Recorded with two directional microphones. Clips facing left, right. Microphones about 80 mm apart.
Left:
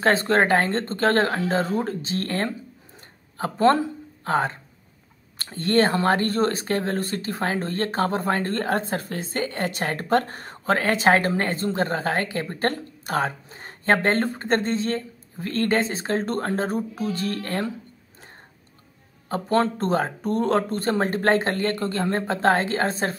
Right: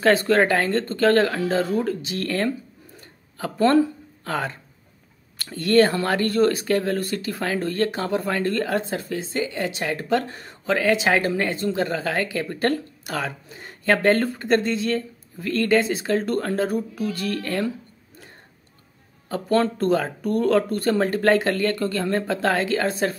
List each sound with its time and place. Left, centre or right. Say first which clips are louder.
0.0 s speech: right 2 dB; left
19.2 s speech: right 1 dB; left